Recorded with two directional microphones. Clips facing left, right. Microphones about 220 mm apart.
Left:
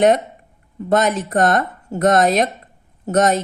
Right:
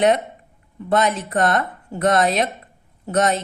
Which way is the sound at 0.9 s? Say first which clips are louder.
Left 2 dB; 45° left (ahead or behind).